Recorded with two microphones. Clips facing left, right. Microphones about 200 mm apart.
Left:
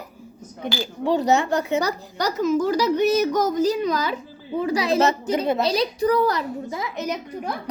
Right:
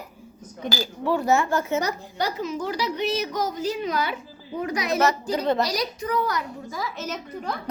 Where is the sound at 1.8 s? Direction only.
40° left (ahead or behind); by 7.5 s 15° left (ahead or behind).